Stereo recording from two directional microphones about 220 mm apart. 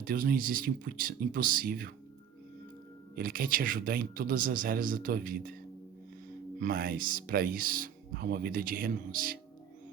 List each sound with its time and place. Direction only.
0.0 s speech: 40° right (ahead or behind)
3.2 s speech: 40° right (ahead or behind)
6.6 s speech: 40° right (ahead or behind)